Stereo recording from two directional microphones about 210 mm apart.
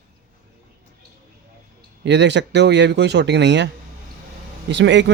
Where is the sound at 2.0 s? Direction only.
55° right (ahead or behind).